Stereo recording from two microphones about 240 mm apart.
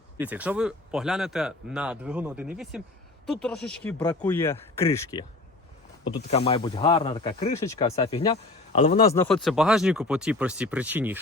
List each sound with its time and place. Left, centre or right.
0.2 s speech: centre
6.1 s speech: left
7.6 s speech: centre
9.0 s speech: centre